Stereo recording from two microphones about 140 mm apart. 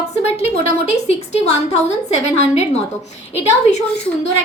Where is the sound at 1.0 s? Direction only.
50° left (ahead or behind).